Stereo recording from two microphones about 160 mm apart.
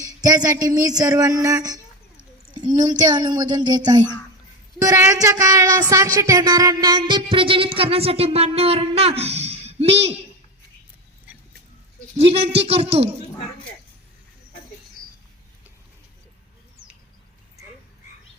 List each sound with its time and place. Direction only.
0.0 s speech: 20° right (ahead or behind)
3.1 s speech: 25° right (ahead or behind)
12.1 s speech: 40° right (ahead or behind)